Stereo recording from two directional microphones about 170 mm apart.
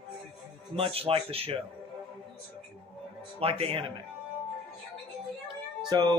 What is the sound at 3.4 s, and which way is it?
Speech, 35° right (ahead or behind).